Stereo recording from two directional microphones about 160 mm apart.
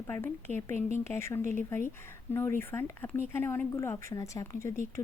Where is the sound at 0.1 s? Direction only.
15° left (ahead or behind).